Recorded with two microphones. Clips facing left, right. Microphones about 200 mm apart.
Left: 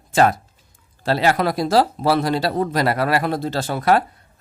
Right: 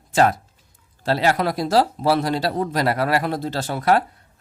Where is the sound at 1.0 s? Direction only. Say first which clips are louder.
Left 1 dB; 80° left.